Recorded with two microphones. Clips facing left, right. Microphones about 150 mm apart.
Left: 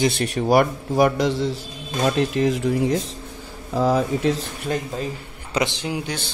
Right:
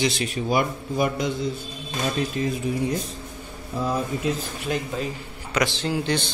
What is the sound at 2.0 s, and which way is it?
Speech, 75° left (ahead or behind).